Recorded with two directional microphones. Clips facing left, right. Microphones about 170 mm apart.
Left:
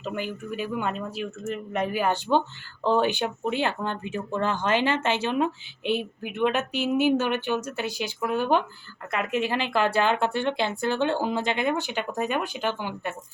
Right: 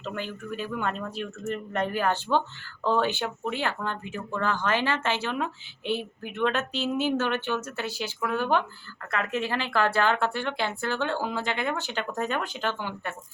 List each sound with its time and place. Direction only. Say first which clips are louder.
0.0 s speech: left 3 dB; 10° left (ahead or behind)